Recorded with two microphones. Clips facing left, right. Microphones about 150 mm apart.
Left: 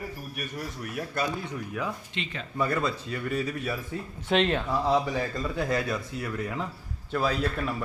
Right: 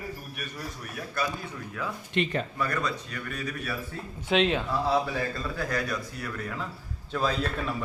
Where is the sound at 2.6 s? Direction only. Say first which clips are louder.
Left 3 dB; 30° left (ahead or behind).